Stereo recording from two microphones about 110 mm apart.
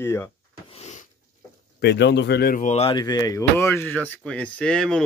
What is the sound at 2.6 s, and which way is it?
Speech, 90° left.